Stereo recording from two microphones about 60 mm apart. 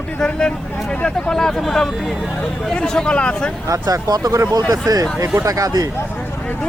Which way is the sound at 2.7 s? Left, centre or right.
Centre.